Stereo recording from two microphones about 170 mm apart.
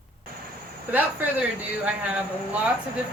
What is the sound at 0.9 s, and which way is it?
Speech, 10° right (ahead or behind).